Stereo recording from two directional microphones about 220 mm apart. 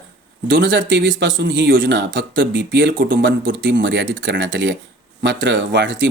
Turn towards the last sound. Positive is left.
turn(degrees=-55)  # may be behind; listen again after turning